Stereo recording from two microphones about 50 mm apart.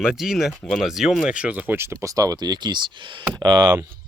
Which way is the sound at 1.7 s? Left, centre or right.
Right.